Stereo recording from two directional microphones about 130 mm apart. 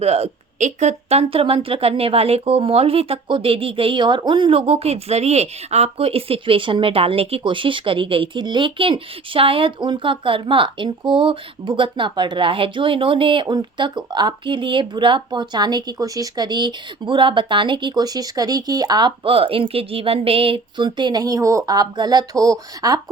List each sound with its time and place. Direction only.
0.0 s speech: 55° right (ahead or behind)
1.3 s speech: 45° right (ahead or behind); by 23.0 s 30° right (ahead or behind)